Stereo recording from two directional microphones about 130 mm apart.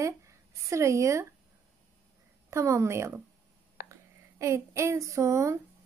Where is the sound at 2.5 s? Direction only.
20° right (ahead or behind).